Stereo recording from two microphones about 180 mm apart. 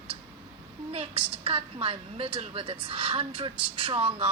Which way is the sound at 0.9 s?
30° right (ahead or behind).